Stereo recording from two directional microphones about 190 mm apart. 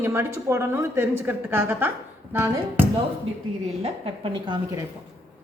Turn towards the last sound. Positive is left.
turn(degrees=-25)  # may be behind; listen again after turning